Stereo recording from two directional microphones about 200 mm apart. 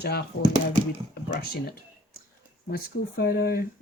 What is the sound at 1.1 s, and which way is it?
Speech, 50° left (ahead or behind).